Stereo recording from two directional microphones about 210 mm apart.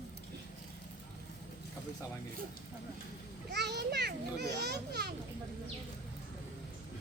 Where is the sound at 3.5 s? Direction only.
55° right (ahead or behind).